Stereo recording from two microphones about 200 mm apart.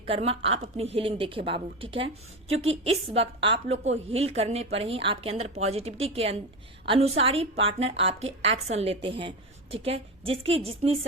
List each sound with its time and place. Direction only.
0.0 s a woman's voice: 30° right (ahead or behind)